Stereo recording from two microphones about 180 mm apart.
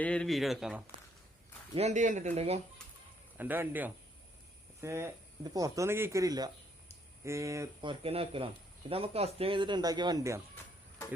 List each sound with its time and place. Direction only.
0.0 s speech: 5° left (ahead or behind)
1.7 s speech: 40° right (ahead or behind)
3.3 s speech: 10° right (ahead or behind)
7.8 s speech: 30° right (ahead or behind)